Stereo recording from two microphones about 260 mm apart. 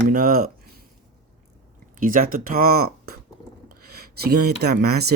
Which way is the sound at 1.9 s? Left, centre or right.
Right.